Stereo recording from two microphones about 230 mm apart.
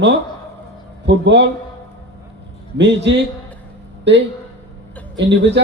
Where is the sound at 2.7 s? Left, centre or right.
Right.